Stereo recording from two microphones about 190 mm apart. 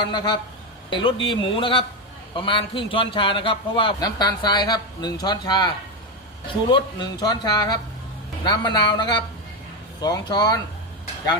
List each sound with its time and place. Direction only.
0.0 s a man's voice: 20° left (ahead or behind)
6.7 s a man's voice: 25° left (ahead or behind)